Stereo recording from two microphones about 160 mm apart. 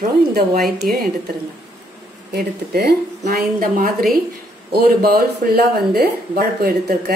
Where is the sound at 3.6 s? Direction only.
60° right (ahead or behind).